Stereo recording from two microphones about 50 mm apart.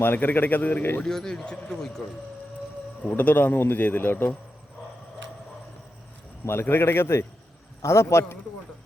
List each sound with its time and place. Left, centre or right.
0.0 s speech: left
1.0 s speech: centre
3.1 s speech: left
6.4 s a man's voice: left
7.8 s a man's voice: left